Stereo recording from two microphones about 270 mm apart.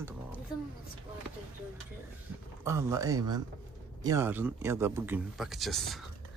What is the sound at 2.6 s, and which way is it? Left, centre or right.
Speech, centre.